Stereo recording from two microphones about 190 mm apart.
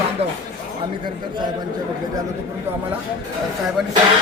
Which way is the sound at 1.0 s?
25° right (ahead or behind).